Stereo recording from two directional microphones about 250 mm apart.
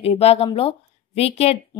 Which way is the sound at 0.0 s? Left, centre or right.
Left.